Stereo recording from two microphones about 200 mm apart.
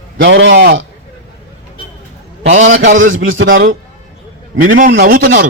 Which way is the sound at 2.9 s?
75° right (ahead or behind).